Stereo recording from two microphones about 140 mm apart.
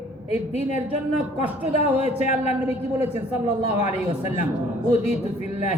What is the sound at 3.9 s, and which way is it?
Speech, 50° left (ahead or behind).